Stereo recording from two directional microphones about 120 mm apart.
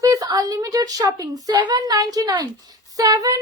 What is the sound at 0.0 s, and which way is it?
A woman's voice, 30° right (ahead or behind).